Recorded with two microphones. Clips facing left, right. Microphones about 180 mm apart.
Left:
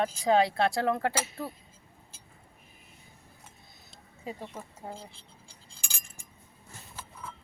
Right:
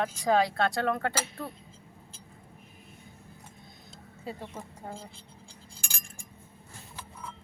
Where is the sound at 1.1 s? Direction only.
5° left (ahead or behind).